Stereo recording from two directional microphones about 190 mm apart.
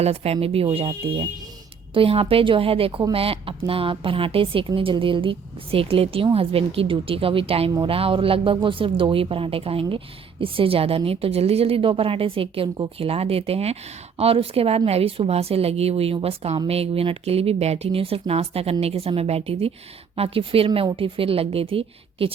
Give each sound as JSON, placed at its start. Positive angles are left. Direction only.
{"t": 0.0, "sound": "speech", "side_deg": -35}